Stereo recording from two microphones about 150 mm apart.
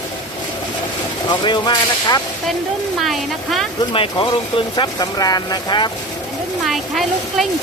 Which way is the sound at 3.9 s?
35° left (ahead or behind).